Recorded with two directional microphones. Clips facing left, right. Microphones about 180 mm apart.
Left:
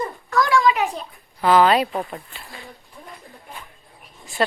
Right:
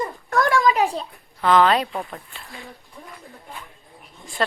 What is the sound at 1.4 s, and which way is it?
Speech, 5° left (ahead or behind).